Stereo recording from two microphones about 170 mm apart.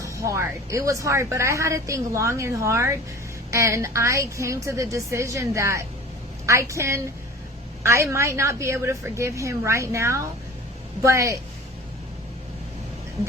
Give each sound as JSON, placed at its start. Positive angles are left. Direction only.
{"t": 0.0, "sound": "speech", "side_deg": -20}